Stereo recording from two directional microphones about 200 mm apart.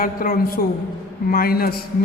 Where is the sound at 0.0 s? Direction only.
45° left (ahead or behind).